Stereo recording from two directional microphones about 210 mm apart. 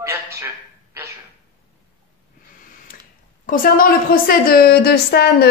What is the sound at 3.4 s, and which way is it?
A woman's voice, 40° left (ahead or behind).